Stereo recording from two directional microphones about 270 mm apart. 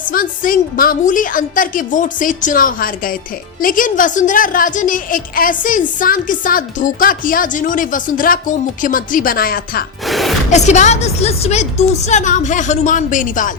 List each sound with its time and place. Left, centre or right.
0.1 s a woman's voice: left
10.1 s gasp: centre
10.5 s a woman's voice: left